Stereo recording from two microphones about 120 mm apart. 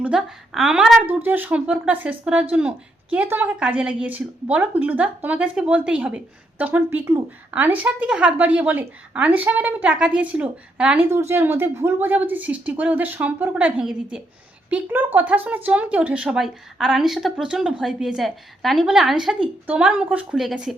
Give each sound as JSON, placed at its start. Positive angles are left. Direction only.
{"t": 0.0, "sound": "a woman's voice", "side_deg": -5}
{"t": 1.2, "sound": "speech", "side_deg": -15}
{"t": 11.1, "sound": "a woman's voice", "side_deg": -20}